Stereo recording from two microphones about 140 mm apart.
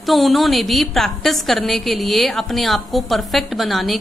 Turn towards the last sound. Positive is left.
turn(degrees=0)  # may be behind; listen again after turning